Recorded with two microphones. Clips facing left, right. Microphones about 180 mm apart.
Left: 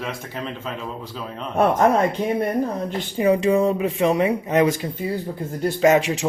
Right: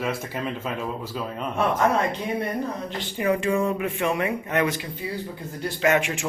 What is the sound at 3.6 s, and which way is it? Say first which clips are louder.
A man's voice: left 5 dB; 35° left (ahead or behind).